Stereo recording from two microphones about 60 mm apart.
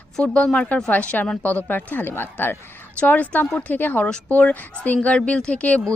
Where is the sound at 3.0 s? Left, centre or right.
Left.